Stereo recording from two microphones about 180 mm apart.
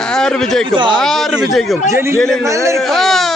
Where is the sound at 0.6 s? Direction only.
25° right (ahead or behind).